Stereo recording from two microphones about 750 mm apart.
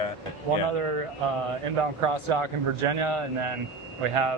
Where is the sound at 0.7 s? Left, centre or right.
Right.